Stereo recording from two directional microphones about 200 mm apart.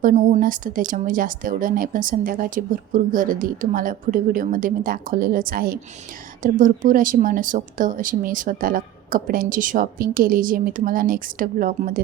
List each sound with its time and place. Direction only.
0.0 s speech: 40° right (ahead or behind)